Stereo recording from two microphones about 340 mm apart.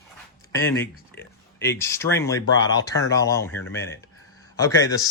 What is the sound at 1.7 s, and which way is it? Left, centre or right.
Speech, centre.